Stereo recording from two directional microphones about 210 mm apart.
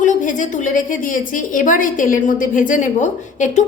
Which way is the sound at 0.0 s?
40° left (ahead or behind).